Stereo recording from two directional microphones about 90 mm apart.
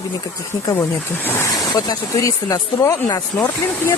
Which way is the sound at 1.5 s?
45° left (ahead or behind).